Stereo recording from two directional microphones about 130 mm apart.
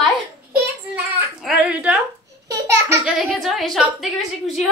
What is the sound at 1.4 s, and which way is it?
Speech, 5° right (ahead or behind).